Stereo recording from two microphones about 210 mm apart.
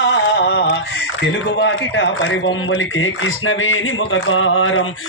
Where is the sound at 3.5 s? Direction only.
65° left (ahead or behind).